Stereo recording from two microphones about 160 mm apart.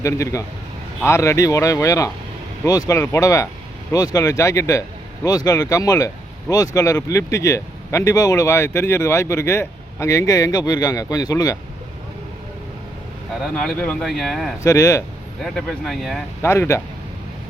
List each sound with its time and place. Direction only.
0.0 s speech: 20° left (ahead or behind)
13.4 s speech: 5° left (ahead or behind)
14.6 s speech: 20° left (ahead or behind)
15.4 s speech: 5° left (ahead or behind)
16.4 s speech: 15° left (ahead or behind)